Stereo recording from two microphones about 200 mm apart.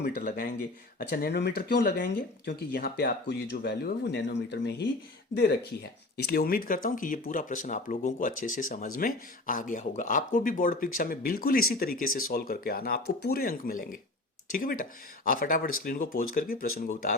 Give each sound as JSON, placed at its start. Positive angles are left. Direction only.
{"t": 0.0, "sound": "speech", "side_deg": 45}